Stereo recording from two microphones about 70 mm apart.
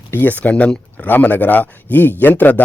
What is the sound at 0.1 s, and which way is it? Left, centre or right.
Speech, left.